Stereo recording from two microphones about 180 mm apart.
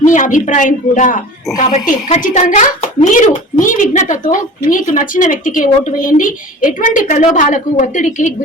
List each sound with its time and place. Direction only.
0.0 s a woman's voice: 45° left (ahead or behind)